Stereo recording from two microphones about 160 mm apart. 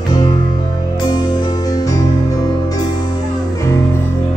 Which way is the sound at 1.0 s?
25° left (ahead or behind).